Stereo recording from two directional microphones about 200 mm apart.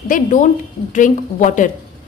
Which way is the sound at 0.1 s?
40° left (ahead or behind).